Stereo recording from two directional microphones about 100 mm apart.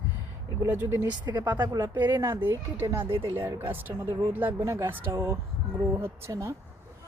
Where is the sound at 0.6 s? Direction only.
20° right (ahead or behind).